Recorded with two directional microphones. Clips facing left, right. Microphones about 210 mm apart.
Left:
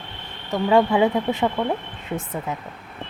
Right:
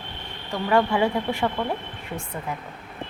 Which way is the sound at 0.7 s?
20° left (ahead or behind).